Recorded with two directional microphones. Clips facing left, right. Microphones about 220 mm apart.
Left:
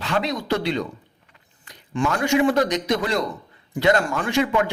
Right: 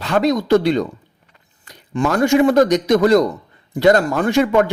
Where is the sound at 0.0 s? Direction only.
45° right (ahead or behind).